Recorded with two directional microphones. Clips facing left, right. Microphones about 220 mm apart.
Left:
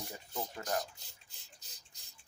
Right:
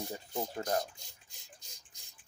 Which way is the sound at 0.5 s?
25° right (ahead or behind).